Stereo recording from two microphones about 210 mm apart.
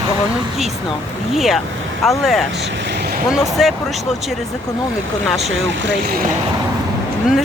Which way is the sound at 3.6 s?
Centre (ahead or behind).